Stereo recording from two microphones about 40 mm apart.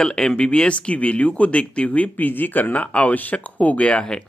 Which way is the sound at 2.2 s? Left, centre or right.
Left.